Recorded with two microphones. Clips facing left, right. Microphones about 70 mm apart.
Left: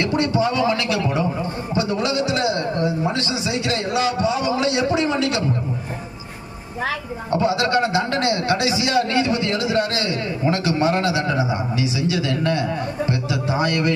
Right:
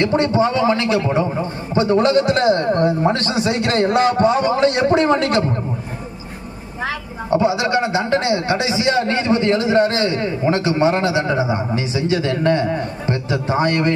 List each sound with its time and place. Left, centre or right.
0.0 s a man's voice: right
7.3 s a man's voice: right